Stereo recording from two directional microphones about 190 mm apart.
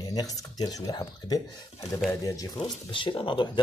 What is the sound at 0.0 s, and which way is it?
Speech, 20° left (ahead or behind).